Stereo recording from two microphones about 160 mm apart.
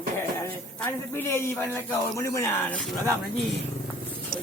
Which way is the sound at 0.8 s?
15° left (ahead or behind).